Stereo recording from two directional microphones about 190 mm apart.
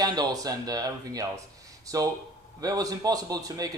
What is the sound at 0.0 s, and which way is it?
Speech, 20° right (ahead or behind).